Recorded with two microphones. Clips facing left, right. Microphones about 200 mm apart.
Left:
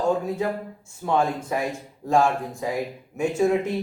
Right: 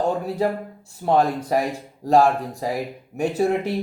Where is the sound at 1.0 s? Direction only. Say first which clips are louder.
Right 4 dB; 35° right (ahead or behind).